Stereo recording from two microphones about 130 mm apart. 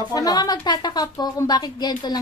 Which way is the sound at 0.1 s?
30° left (ahead or behind).